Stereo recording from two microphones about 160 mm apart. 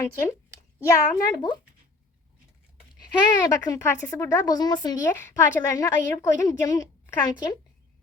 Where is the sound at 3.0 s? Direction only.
25° left (ahead or behind).